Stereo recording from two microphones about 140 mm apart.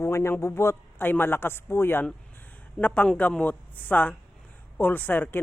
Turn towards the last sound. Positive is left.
turn(degrees=15)  # may be behind; listen again after turning